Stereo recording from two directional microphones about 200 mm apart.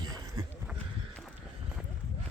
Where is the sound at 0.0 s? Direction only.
20° right (ahead or behind).